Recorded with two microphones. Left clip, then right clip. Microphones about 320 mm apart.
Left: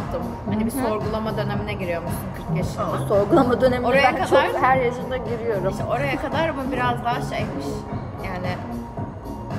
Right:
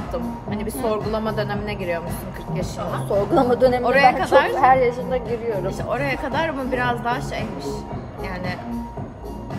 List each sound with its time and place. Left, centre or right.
0.8 s speech: right
3.3 s a woman's voice: centre
3.8 s speech: right
4.6 s a woman's voice: centre
5.7 s speech: right